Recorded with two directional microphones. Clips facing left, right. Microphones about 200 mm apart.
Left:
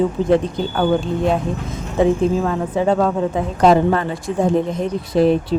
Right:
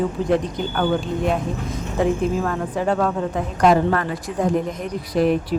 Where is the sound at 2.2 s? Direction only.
25° left (ahead or behind).